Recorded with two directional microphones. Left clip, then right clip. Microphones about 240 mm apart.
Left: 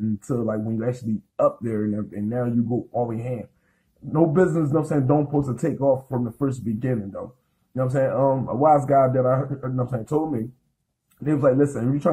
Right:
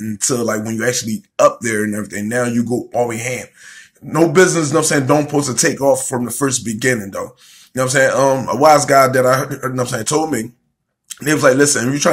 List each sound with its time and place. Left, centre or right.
0.3 s a man's voice: right